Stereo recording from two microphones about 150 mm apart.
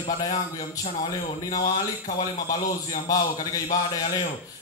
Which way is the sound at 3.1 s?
25° left (ahead or behind).